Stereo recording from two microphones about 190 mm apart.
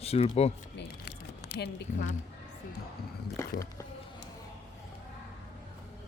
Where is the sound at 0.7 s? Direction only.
65° left (ahead or behind).